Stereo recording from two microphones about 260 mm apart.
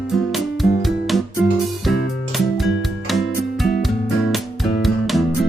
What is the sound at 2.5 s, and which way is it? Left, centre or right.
Music, centre.